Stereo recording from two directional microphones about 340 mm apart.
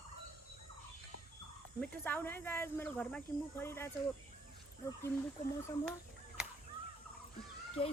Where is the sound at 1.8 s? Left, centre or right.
Centre.